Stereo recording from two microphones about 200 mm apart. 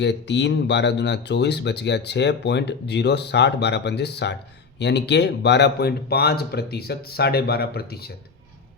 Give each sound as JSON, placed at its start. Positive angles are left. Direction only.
{"t": 0.0, "sound": "speech", "side_deg": 60}